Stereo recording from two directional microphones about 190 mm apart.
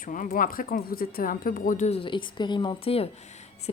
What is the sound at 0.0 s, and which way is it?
A woman's voice, 45° left (ahead or behind).